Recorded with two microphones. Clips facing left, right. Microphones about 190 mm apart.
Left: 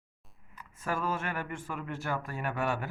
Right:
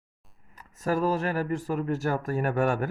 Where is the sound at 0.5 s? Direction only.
40° right (ahead or behind).